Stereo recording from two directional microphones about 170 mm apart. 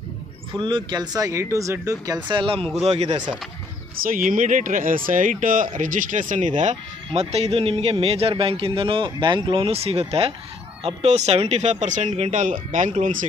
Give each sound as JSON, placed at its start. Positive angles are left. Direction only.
{"t": 0.6, "sound": "a man's voice", "side_deg": -30}
{"t": 4.0, "sound": "a man's voice", "side_deg": -55}